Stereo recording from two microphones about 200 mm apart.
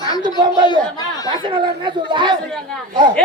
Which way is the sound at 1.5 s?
25° right (ahead or behind).